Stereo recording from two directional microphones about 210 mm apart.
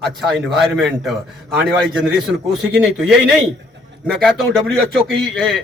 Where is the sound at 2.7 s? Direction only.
Centre (ahead or behind).